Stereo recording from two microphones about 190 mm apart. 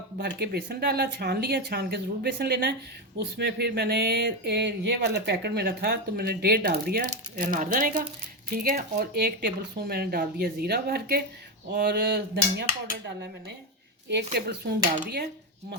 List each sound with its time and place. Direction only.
0.2 s speech: 60° right (ahead or behind)
14.3 s speech: 60° right (ahead or behind)